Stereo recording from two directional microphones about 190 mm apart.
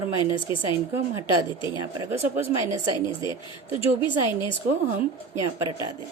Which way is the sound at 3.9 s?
25° left (ahead or behind).